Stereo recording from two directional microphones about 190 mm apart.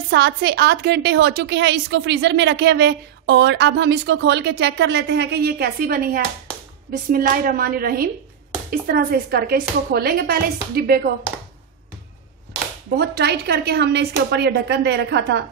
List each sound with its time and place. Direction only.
0.1 s a woman's voice: 60° right (ahead or behind)
12.9 s a woman's voice: 55° right (ahead or behind)